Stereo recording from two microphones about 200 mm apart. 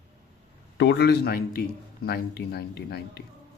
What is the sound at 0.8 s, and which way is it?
A man's voice, 60° left (ahead or behind).